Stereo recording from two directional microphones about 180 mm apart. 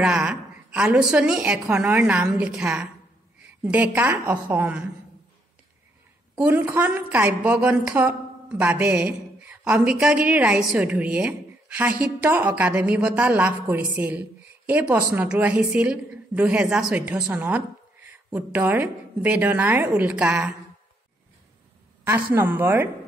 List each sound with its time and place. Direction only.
0.0 s a woman's voice: 5° right (ahead or behind)
6.3 s a woman's voice: 10° right (ahead or behind)
22.0 s a woman's voice: 15° right (ahead or behind)